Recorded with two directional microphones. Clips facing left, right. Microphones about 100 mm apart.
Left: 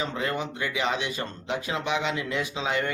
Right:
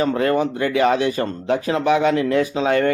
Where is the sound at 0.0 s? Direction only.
55° right (ahead or behind).